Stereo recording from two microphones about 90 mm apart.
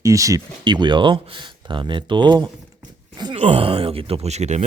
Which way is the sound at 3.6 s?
90° right.